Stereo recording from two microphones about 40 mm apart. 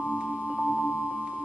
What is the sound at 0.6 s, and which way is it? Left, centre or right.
Music, right.